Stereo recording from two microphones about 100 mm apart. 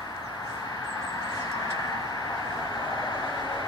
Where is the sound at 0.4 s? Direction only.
40° left (ahead or behind).